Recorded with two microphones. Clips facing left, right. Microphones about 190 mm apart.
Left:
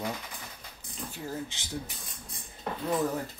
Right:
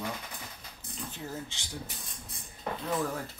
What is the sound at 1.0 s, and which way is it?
Speech, 15° left (ahead or behind).